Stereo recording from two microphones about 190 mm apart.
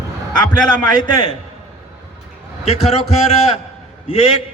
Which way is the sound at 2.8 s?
30° left (ahead or behind).